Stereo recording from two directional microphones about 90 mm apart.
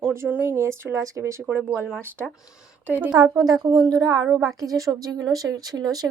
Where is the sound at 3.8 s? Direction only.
45° right (ahead or behind).